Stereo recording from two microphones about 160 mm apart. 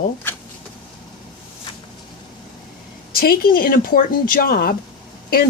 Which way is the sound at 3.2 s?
65° left (ahead or behind).